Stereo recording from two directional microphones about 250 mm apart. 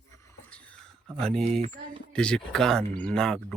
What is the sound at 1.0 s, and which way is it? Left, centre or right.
Speech, centre.